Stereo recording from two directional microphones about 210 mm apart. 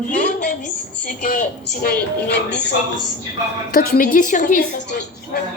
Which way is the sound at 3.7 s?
40° left (ahead or behind).